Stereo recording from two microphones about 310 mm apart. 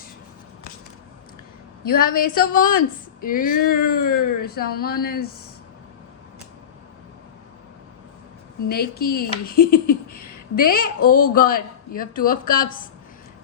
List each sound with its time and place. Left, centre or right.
1.8 s speech: left
8.7 s speech: left